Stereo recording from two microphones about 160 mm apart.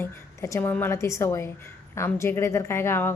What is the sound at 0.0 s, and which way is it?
Speech, 20° left (ahead or behind).